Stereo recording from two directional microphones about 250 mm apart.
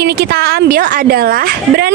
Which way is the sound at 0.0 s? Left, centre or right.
Right.